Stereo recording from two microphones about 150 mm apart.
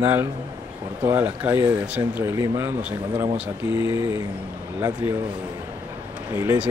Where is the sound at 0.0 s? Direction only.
15° right (ahead or behind).